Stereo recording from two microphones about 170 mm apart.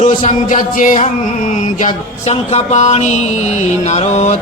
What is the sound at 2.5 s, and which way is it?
Mantra, 40° left (ahead or behind).